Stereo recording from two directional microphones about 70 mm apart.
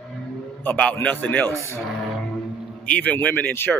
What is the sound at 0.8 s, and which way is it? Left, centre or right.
Speech, centre.